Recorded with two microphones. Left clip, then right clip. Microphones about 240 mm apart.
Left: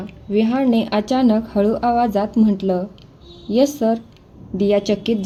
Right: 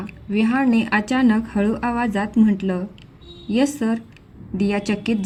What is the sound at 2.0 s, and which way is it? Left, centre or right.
Speech, right.